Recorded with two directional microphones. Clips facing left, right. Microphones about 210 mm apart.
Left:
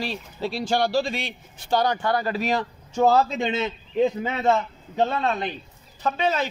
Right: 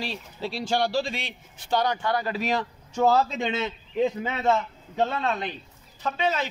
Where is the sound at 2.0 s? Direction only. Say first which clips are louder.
Left 3 dB; 50° left (ahead or behind).